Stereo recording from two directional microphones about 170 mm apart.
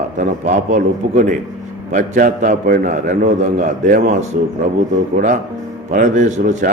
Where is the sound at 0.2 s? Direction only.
45° right (ahead or behind).